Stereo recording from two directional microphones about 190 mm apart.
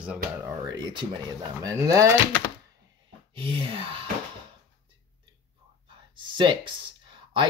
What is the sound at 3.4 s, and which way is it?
Speech, 25° right (ahead or behind).